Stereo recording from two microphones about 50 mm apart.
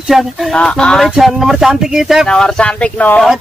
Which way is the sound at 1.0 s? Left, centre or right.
Centre.